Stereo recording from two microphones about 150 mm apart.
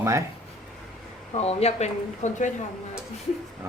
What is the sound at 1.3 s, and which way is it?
Speech, 45° left (ahead or behind).